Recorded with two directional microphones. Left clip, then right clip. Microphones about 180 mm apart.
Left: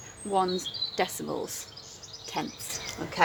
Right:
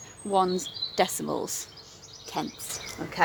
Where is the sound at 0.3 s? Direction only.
30° right (ahead or behind).